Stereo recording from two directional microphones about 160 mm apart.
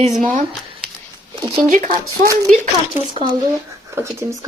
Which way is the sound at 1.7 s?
50° right (ahead or behind).